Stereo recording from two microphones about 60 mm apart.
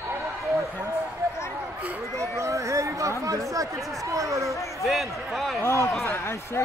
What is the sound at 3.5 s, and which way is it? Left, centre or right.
Chatter, right.